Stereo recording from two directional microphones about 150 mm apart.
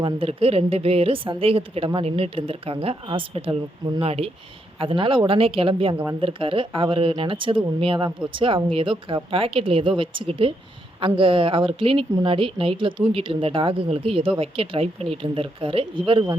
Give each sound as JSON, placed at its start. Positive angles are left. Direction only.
{"t": 0.0, "sound": "speech", "side_deg": -40}